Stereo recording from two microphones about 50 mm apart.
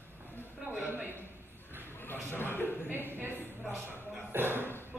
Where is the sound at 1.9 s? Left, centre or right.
Left.